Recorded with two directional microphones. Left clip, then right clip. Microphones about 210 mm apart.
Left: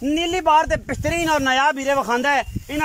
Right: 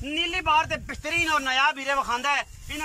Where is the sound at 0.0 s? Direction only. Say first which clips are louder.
Left 6 dB; 30° left (ahead or behind).